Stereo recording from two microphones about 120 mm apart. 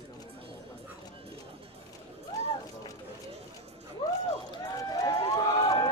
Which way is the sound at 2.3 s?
30° left (ahead or behind).